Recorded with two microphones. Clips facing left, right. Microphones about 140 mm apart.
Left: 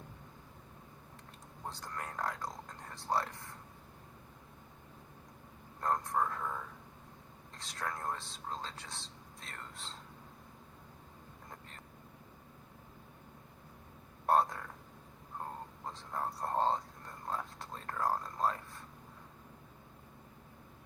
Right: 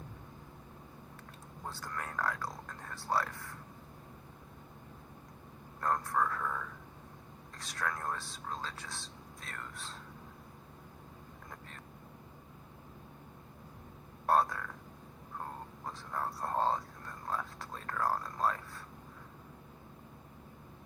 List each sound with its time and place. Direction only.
1.7 s speech: 20° left (ahead or behind)
5.8 s speech: 20° left (ahead or behind)
7.6 s speech: 25° left (ahead or behind)
14.3 s frog: 20° left (ahead or behind)
15.9 s a sound: 20° left (ahead or behind)